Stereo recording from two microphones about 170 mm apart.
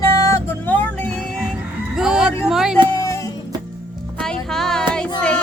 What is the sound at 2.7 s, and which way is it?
Music, 25° right (ahead or behind).